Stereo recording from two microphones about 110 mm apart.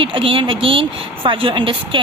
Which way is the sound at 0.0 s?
50° right (ahead or behind).